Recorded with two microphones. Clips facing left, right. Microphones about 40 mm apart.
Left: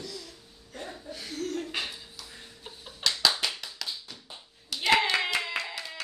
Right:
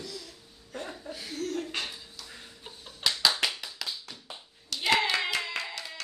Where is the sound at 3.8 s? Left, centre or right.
Centre.